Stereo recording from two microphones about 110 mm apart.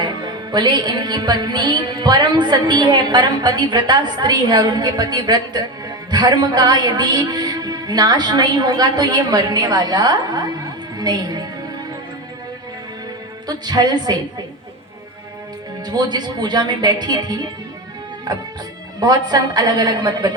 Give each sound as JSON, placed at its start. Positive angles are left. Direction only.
{"t": 0.0, "sound": "music", "side_deg": -40}
{"t": 11.0, "sound": "a woman's voice", "side_deg": -40}
{"t": 13.5, "sound": "music", "side_deg": -40}
{"t": 15.9, "sound": "music", "side_deg": -40}